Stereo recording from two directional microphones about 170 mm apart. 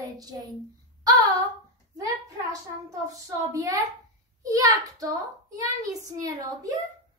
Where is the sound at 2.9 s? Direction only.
20° right (ahead or behind).